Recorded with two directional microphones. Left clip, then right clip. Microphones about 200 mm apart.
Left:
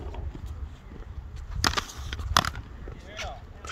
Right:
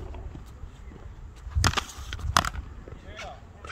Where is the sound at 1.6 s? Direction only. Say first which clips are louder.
Even; 20° right (ahead or behind).